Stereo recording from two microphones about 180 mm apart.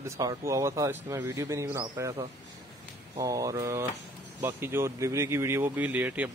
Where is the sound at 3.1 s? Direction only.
20° right (ahead or behind).